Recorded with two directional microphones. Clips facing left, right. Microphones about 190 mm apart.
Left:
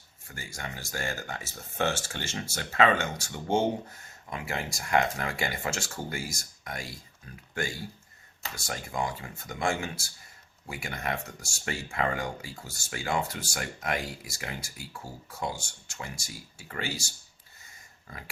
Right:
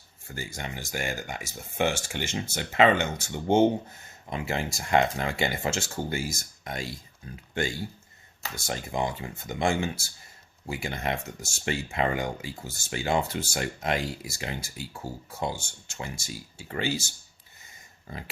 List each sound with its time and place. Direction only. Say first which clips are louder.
0.3 s speech: right 4 dB; 25° right (ahead or behind)
18.1 s speech: right 5 dB; 25° right (ahead or behind)